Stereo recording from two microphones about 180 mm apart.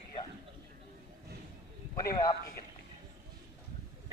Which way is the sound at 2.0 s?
20° left (ahead or behind).